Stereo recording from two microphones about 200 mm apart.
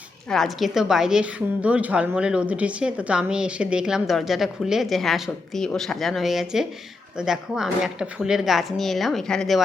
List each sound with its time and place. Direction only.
0.3 s a woman's voice: centre (ahead or behind)